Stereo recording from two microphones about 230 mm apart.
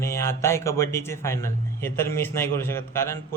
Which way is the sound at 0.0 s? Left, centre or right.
Centre.